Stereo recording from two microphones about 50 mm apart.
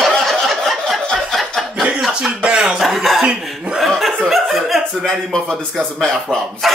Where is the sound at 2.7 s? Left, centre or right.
Centre.